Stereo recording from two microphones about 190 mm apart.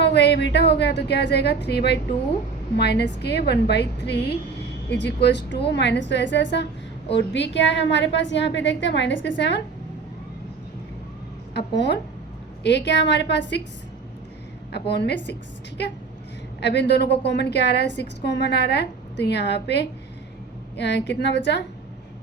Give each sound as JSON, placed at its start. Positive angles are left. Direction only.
{"t": 0.0, "sound": "a woman's voice", "side_deg": 65}
{"t": 11.5, "sound": "a woman's voice", "side_deg": 65}
{"t": 14.7, "sound": "a woman's voice", "side_deg": 60}
{"t": 16.6, "sound": "a woman's voice", "side_deg": 65}